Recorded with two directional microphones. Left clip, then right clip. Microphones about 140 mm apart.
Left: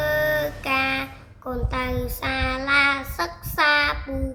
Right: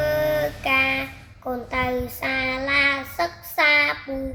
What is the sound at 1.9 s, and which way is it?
Child singing, 20° left (ahead or behind).